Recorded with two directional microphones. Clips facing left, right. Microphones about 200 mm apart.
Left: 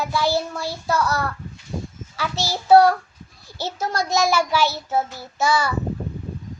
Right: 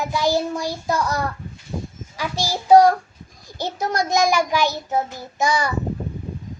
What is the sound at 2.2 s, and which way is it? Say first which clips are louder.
A child's voice: right 1 dB; 15° right (ahead or behind).